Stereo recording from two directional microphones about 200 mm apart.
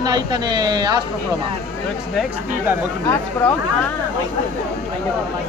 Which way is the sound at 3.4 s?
5° left (ahead or behind).